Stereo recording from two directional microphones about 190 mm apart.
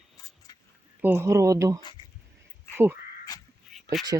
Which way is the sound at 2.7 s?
10° right (ahead or behind).